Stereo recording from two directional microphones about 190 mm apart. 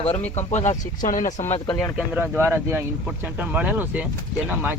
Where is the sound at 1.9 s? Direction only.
10° right (ahead or behind).